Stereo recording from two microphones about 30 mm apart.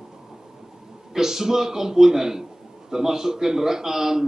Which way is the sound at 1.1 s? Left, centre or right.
Centre.